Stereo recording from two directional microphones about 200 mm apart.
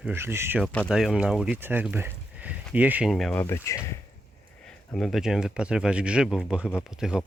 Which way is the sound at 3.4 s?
15° left (ahead or behind).